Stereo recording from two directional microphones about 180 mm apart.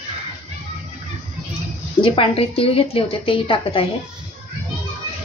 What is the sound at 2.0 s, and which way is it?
A woman's voice, 30° left (ahead or behind).